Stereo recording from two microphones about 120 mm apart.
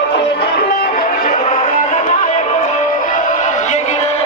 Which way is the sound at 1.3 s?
90° left.